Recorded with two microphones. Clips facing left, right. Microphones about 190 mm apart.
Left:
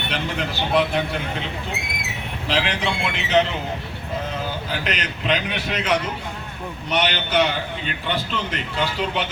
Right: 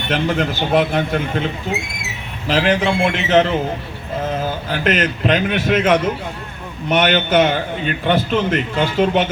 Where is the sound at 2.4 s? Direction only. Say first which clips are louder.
Right 7 dB; 45° right (ahead or behind).